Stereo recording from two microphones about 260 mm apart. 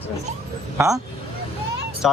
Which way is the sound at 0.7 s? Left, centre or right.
Centre.